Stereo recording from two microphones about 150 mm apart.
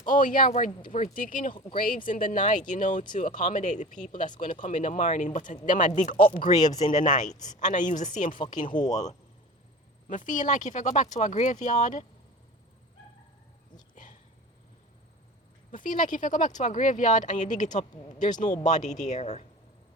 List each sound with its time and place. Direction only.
0.0 s speech: 65° left (ahead or behind)
8.7 s speech: 25° left (ahead or behind)
10.1 s speech: 60° left (ahead or behind)
13.9 s dog: 55° left (ahead or behind)
15.7 s speech: 60° left (ahead or behind)